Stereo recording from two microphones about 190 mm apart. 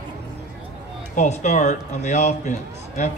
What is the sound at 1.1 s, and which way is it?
A man's voice, 35° left (ahead or behind).